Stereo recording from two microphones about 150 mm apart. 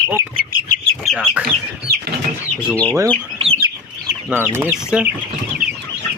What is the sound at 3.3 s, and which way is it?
Chicken, 40° right (ahead or behind).